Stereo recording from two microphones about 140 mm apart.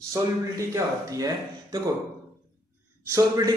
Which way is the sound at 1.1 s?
25° right (ahead or behind).